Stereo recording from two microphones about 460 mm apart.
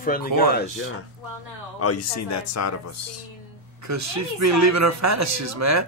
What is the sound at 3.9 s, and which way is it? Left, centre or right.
Speech, right.